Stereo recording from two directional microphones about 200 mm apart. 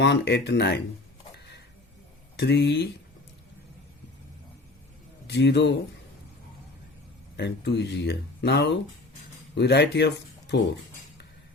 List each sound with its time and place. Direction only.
0.0 s speech: 55° left (ahead or behind)
1.3 s a sound: 55° left (ahead or behind)
2.3 s speech: 55° left (ahead or behind)
5.3 s speech: 60° left (ahead or behind)
7.3 s speech: 60° left (ahead or behind)